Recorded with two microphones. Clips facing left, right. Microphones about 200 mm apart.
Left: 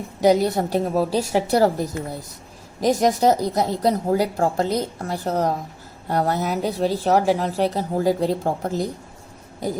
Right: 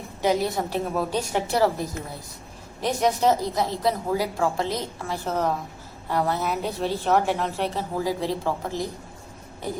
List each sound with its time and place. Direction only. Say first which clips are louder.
0.2 s a woman's voice: left 6 dB; 40° left (ahead or behind)